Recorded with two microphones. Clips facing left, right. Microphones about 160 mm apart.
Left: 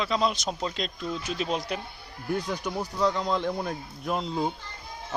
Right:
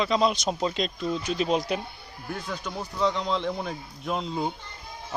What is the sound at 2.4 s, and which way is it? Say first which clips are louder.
Speech: left 3 dB; 15° left (ahead or behind).